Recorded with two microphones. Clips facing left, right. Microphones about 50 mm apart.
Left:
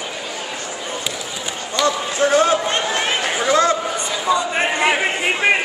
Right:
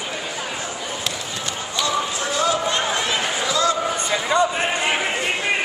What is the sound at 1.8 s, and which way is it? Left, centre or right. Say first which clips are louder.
Run: left 6 dB; left.